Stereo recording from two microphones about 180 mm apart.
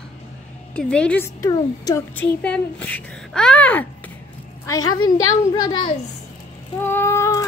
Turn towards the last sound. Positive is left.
turn(degrees=15)  # may be behind; listen again after turning